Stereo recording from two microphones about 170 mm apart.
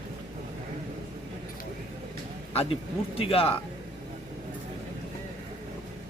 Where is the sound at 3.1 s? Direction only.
35° left (ahead or behind).